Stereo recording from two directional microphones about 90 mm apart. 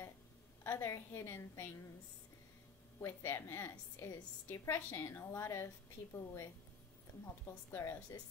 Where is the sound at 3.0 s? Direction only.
30° left (ahead or behind).